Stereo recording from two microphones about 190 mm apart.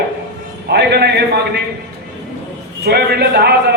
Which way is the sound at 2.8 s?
55° right (ahead or behind).